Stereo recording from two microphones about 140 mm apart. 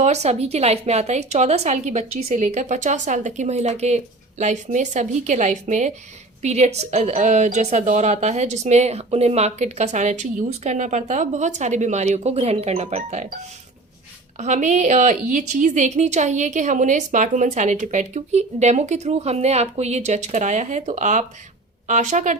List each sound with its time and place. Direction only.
0.0 s a woman's voice: 50° right (ahead or behind)
14.4 s a woman's voice: 55° right (ahead or behind)